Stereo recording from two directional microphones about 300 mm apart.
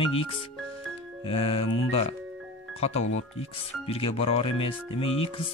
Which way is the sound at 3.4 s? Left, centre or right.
Centre.